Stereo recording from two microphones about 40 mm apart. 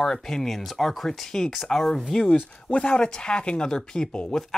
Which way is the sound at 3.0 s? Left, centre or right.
Left.